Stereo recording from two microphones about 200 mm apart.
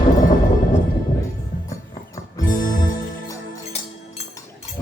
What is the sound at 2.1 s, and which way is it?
Music, 40° left (ahead or behind).